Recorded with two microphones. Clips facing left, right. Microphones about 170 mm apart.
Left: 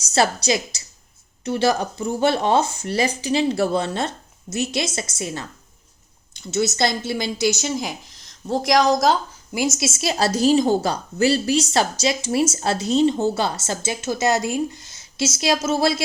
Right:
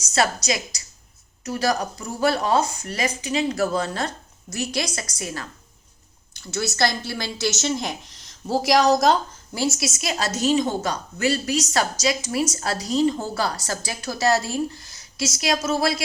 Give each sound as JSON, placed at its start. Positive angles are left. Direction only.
{"t": 0.0, "sound": "a woman's voice", "side_deg": 30}
{"t": 9.6, "sound": "a woman's voice", "side_deg": 20}